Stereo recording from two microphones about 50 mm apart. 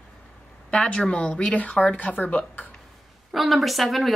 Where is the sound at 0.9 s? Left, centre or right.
Left.